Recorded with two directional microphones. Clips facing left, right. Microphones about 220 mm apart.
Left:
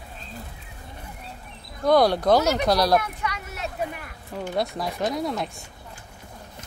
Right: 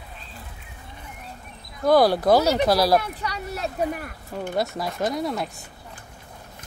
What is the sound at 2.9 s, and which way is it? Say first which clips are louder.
Speech: right 1 dB; 35° right (ahead or behind).